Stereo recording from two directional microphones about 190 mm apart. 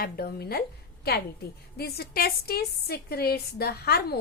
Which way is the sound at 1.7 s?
55° left (ahead or behind).